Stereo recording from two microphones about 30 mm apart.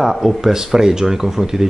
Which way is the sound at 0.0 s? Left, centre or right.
Centre.